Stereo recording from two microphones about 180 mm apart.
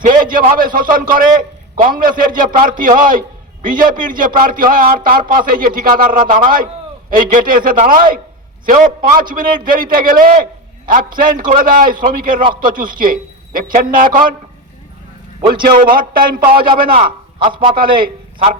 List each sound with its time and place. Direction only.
0.0 s a man's voice: 50° right (ahead or behind)
15.5 s a man's voice: 50° right (ahead or behind)
16.9 s a man's voice: 30° right (ahead or behind)